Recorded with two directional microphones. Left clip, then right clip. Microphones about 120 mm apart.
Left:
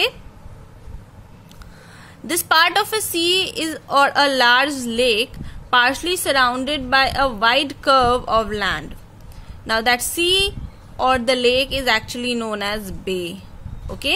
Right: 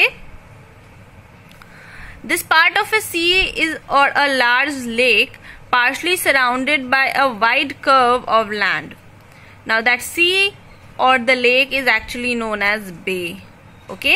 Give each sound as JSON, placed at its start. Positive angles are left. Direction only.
{"t": 1.9, "sound": "a woman's voice", "side_deg": 20}